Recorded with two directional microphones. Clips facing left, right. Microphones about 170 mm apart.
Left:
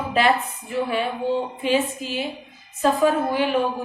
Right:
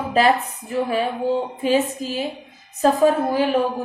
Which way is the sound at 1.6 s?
40° right (ahead or behind).